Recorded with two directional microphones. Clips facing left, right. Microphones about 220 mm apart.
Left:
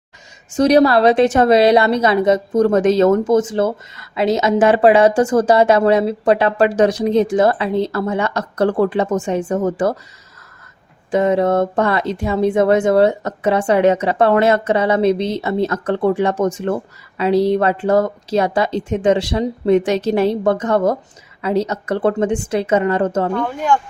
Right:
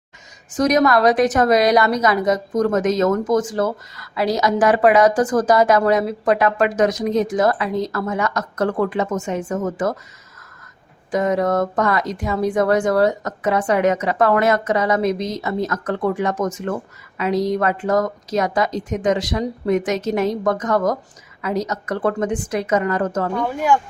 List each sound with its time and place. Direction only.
0.5 s speech: 30° left (ahead or behind)
11.1 s speech: 25° left (ahead or behind)
23.3 s speech: 10° right (ahead or behind)